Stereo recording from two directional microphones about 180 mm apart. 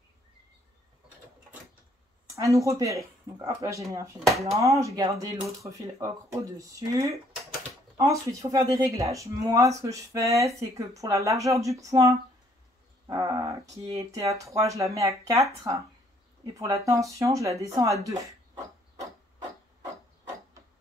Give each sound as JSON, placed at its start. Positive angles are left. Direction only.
{"t": 2.3, "sound": "speech", "side_deg": -15}
{"t": 4.3, "sound": "speech", "side_deg": 0}
{"t": 4.6, "sound": "speech", "side_deg": -15}
{"t": 13.0, "sound": "dog", "side_deg": -20}
{"t": 13.9, "sound": "speech", "side_deg": -20}